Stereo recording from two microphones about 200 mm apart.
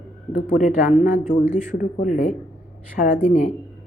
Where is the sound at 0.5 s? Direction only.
40° left (ahead or behind).